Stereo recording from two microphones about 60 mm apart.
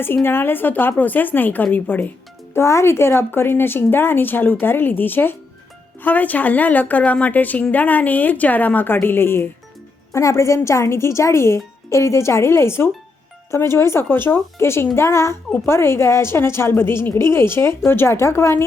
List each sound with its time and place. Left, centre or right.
0.3 s a woman's voice: left
2.5 s a woman's voice: left
10.1 s a woman's voice: left